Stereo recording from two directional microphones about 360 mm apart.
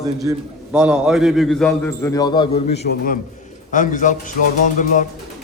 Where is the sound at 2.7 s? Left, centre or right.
Left.